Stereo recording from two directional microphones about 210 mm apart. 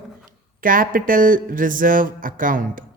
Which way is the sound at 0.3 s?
40° right (ahead or behind).